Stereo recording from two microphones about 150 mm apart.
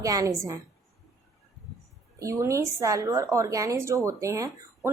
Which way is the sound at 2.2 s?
20° right (ahead or behind).